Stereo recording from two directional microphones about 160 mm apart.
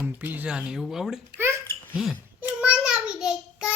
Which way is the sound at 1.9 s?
5° right (ahead or behind).